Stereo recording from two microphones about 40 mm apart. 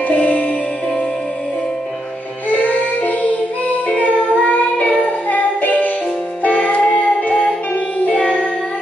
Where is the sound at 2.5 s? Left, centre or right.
Left.